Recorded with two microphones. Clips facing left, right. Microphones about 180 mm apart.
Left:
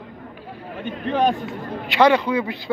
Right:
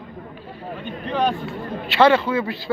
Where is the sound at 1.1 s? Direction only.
20° left (ahead or behind).